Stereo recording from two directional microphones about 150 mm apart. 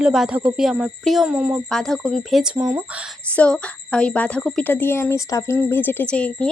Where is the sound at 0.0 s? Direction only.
5° right (ahead or behind).